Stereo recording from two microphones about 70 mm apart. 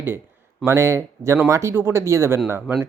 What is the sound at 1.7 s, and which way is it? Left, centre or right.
Speech, right.